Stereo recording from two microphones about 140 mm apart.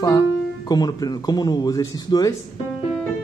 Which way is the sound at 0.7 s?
30° left (ahead or behind).